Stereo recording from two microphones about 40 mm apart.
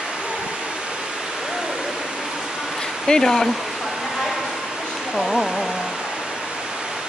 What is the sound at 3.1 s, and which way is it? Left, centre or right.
Speech, centre.